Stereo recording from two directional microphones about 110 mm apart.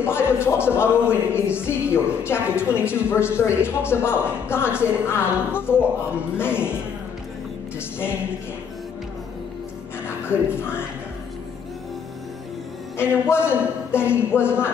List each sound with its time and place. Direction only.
0.0 s a woman's voice: 20° left (ahead or behind)
10.0 s speech: 20° left (ahead or behind)
12.9 s a woman's voice: 20° left (ahead or behind)